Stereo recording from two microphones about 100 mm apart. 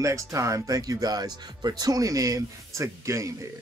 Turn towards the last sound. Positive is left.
turn(degrees=-30)  # may be behind; listen again after turning